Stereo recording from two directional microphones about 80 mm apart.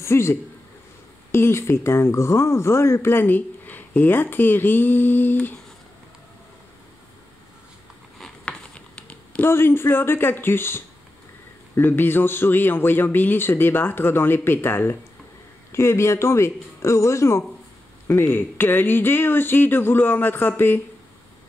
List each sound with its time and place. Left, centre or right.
0.0 s a man's voice: left
8.2 s a sound: centre
9.5 s speech: left